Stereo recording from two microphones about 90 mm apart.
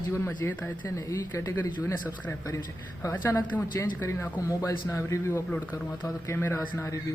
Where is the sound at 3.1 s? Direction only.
20° left (ahead or behind).